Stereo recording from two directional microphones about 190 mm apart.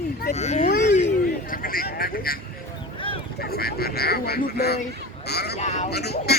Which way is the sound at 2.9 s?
25° left (ahead or behind).